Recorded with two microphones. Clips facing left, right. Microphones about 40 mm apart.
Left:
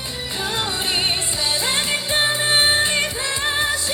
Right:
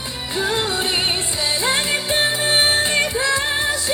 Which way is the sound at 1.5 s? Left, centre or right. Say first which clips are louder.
Right 3 dB; right.